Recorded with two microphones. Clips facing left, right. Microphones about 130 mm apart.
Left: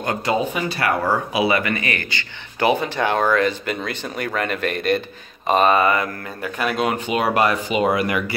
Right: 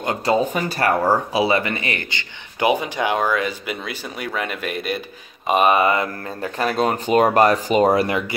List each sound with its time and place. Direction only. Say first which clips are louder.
0.0 s speech: right 2 dB; 25° right (ahead or behind)